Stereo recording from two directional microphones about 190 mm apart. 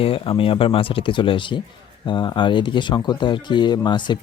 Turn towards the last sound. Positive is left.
turn(degrees=25)  # may be behind; listen again after turning